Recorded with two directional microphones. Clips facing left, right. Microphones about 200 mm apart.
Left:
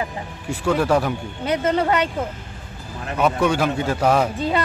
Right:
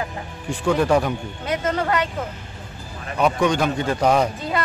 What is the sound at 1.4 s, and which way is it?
Speech, 25° left (ahead or behind).